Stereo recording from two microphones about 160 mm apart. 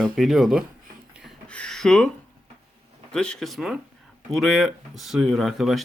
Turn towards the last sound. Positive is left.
turn(degrees=0)  # may be behind; listen again after turning